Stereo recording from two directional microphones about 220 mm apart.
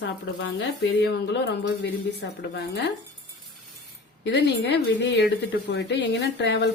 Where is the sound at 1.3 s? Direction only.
50° left (ahead or behind).